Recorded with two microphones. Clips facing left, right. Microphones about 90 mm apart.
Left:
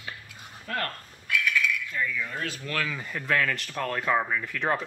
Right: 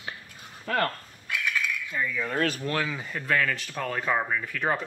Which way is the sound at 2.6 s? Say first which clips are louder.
Right 3 dB; 25° right (ahead or behind).